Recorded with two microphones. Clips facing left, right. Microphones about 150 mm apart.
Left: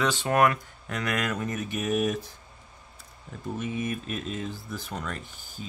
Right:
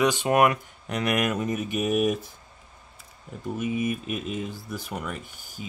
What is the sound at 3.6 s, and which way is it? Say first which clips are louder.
Speech: right 4 dB; 10° right (ahead or behind).